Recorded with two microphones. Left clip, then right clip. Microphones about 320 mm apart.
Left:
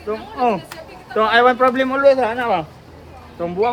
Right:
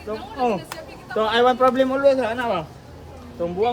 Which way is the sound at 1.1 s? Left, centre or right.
Centre.